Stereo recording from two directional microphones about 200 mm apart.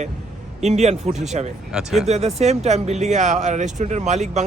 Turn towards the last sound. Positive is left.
turn(degrees=-35)  # may be behind; listen again after turning